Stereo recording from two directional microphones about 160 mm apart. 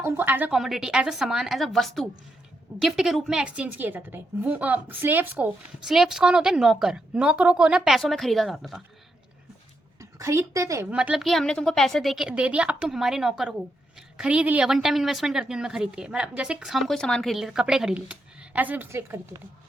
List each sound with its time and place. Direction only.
0.0 s a woman's voice: 10° right (ahead or behind)
10.0 s a woman's voice: 20° right (ahead or behind)
10.8 s a woman's voice: 5° right (ahead or behind)